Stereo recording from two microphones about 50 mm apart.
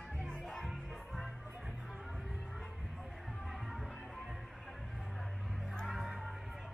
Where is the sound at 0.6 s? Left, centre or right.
Centre.